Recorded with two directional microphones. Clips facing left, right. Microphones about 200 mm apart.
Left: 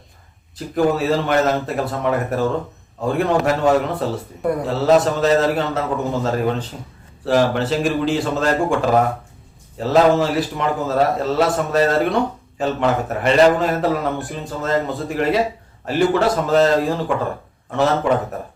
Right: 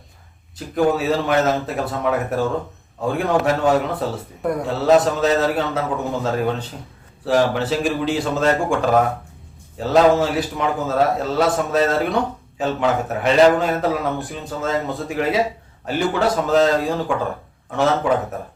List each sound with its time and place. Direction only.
0.5 s a man's voice: centre (ahead or behind)